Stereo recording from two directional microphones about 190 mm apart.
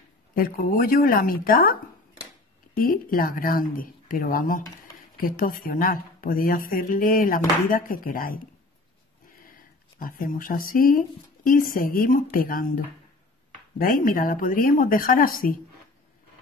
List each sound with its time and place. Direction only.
0.3 s speech: 50° left (ahead or behind)
9.4 s speech: 45° left (ahead or behind)